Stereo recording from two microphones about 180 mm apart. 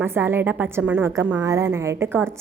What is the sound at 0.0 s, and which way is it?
A woman's voice, 10° right (ahead or behind).